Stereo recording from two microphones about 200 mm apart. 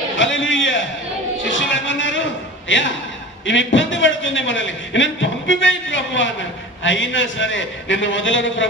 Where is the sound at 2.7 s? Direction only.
70° left (ahead or behind).